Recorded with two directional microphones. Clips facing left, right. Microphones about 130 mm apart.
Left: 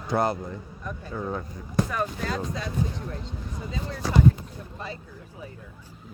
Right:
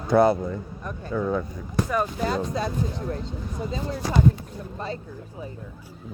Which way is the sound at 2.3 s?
35° right (ahead or behind).